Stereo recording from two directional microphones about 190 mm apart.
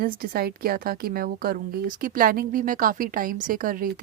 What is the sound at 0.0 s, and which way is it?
Speech, 50° right (ahead or behind).